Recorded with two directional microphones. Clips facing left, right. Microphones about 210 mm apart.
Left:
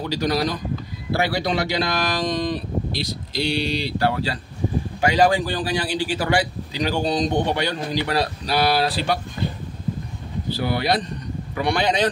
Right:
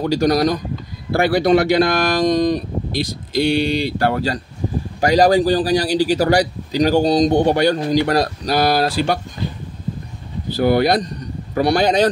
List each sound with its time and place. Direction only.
0.0 s a man's voice: 45° right (ahead or behind)
10.5 s a man's voice: 45° right (ahead or behind)